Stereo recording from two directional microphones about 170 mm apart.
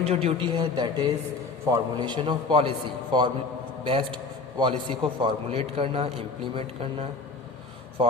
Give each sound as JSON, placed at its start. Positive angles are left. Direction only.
{"t": 0.0, "sound": "a man's voice", "side_deg": -35}